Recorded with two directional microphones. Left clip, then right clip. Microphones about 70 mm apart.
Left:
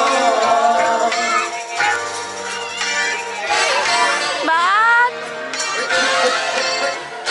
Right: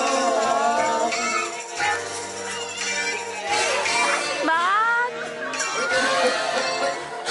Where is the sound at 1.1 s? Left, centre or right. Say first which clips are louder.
Left 6 dB; left.